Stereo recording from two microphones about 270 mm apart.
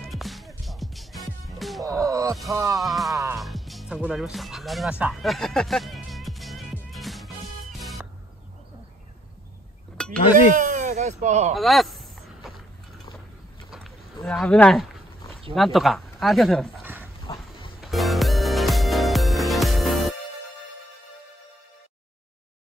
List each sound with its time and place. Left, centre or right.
0.1 s music: centre
1.9 s music: centre
2.8 s music: centre
10.5 s speech: right
11.5 s a sound: centre
13.7 s livestock: centre
15.5 s speech: centre
17.7 s music: centre